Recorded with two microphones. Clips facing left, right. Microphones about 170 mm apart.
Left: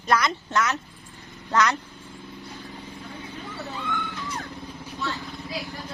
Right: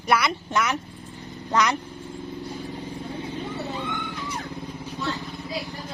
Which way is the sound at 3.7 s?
20° right (ahead or behind).